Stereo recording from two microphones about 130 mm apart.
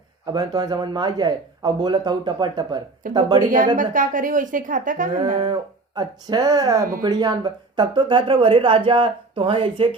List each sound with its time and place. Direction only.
0.3 s speech: 30° right (ahead or behind)
3.4 s a woman's voice: 90° right
5.4 s speech: 35° right (ahead or behind)